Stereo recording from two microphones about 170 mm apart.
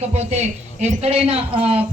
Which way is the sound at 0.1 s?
40° right (ahead or behind).